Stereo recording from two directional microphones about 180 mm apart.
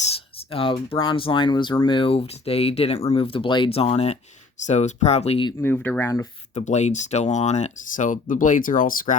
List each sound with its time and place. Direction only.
0.5 s speech: 30° left (ahead or behind)
5.5 s speech: 10° left (ahead or behind)
6.5 s speech: 40° left (ahead or behind)